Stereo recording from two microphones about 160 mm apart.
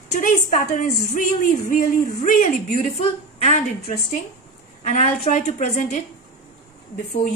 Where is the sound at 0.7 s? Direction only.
55° left (ahead or behind).